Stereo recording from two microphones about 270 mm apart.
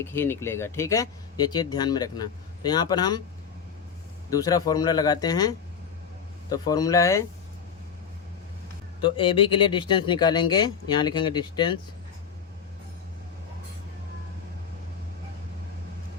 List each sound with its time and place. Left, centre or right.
0.0 s speech: centre
4.3 s speech: centre
9.0 s speech: centre